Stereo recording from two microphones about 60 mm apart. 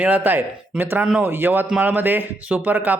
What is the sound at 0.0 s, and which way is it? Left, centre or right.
Speech, right.